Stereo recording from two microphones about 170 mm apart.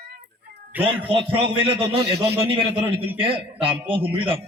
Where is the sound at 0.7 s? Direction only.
10° right (ahead or behind).